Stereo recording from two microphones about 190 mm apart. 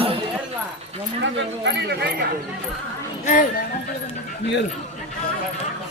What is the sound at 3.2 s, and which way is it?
Speech, 45° left (ahead or behind).